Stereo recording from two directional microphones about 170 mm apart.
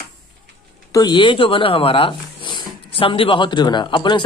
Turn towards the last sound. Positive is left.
turn(degrees=25)  # may be behind; listen again after turning